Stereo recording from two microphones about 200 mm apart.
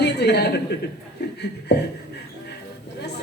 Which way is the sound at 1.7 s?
55° left (ahead or behind).